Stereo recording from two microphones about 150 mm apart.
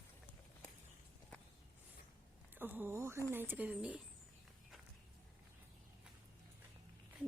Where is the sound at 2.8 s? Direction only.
15° right (ahead or behind).